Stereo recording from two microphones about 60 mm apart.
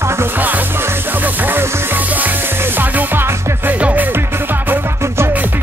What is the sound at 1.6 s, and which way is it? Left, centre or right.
Music, right.